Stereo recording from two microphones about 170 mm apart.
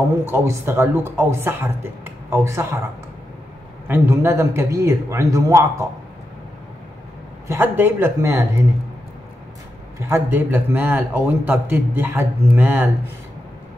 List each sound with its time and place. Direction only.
0.2 s a man's voice: 15° right (ahead or behind)
3.8 s a man's voice: 15° right (ahead or behind)
7.4 s a man's voice: 15° right (ahead or behind)
9.9 s a man's voice: 15° right (ahead or behind)